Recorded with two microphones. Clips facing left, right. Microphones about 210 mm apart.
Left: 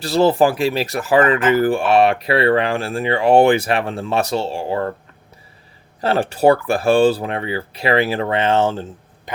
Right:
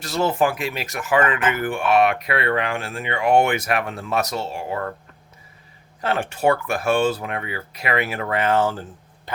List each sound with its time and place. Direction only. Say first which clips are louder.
0.0 s speech: left 6 dB; 35° left (ahead or behind)
6.0 s speech: left 6 dB; 35° left (ahead or behind)